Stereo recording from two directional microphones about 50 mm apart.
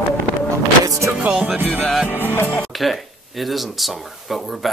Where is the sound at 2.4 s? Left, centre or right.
Left.